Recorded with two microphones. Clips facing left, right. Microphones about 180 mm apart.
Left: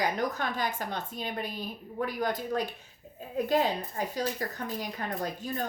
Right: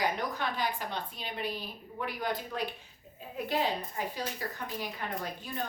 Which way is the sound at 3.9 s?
40° left (ahead or behind).